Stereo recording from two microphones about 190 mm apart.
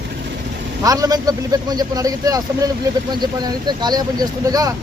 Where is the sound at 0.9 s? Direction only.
20° right (ahead or behind).